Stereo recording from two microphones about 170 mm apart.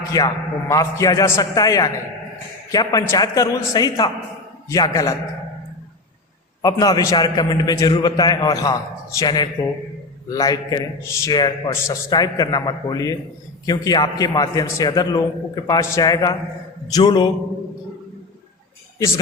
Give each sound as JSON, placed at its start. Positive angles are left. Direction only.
{"t": 0.1, "sound": "a man's voice", "side_deg": 20}
{"t": 6.6, "sound": "a man's voice", "side_deg": 20}
{"t": 18.9, "sound": "a man's voice", "side_deg": 20}